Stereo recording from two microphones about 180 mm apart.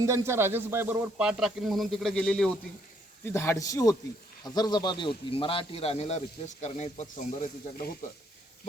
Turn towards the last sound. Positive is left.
turn(degrees=45)  # may be behind; listen again after turning